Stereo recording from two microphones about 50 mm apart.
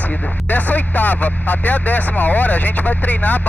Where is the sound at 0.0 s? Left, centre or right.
Left.